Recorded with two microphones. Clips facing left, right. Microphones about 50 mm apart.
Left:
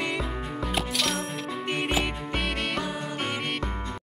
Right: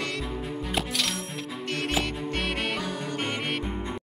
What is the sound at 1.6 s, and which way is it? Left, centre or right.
Music, centre.